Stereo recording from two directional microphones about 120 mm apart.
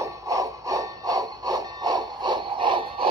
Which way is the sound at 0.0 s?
25° right (ahead or behind).